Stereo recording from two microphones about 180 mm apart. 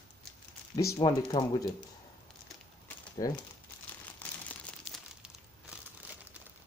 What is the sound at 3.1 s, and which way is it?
Speech, 25° left (ahead or behind).